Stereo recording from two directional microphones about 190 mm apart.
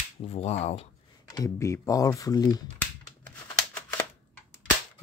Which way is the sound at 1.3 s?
15° left (ahead or behind).